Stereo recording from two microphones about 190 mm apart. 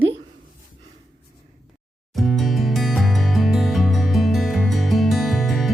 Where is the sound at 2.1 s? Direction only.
Centre (ahead or behind).